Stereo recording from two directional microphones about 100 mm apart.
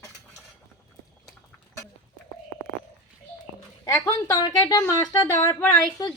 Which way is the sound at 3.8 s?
35° left (ahead or behind).